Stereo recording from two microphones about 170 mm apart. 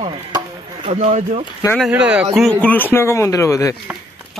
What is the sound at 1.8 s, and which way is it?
Speech, 5° right (ahead or behind).